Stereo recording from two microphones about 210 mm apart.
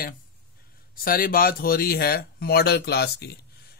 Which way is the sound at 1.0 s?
45° left (ahead or behind).